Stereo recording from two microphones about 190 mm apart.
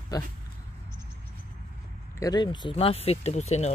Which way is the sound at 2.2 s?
20° left (ahead or behind).